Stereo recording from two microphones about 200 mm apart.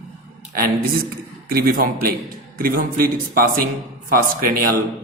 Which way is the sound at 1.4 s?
45° right (ahead or behind).